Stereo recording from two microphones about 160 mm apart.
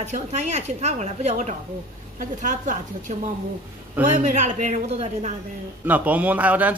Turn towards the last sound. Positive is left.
turn(degrees=-10)  # may be behind; listen again after turning